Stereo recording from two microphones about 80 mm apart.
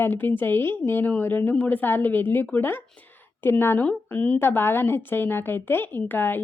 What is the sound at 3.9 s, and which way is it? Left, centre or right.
A woman's voice, centre.